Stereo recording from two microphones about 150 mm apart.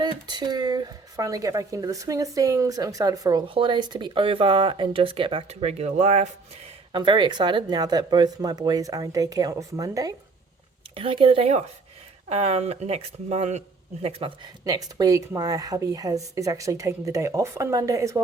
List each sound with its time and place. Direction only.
0.0 s speech: 30° right (ahead or behind)
3.4 s speech: 35° right (ahead or behind)
6.9 s speech: 30° right (ahead or behind)
10.9 s speech: 35° right (ahead or behind)
14.6 s speech: 25° right (ahead or behind)